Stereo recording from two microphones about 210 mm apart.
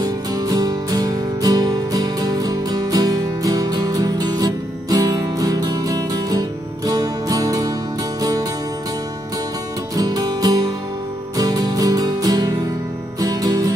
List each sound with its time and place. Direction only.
0.0 s music: 20° right (ahead or behind)
9.9 s music: 20° right (ahead or behind)